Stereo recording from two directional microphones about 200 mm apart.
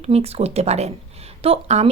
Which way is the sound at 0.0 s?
30° right (ahead or behind).